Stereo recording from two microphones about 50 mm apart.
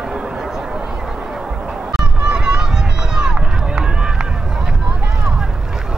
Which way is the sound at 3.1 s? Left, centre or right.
Centre.